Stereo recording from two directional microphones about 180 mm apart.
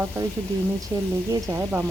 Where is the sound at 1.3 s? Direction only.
15° right (ahead or behind).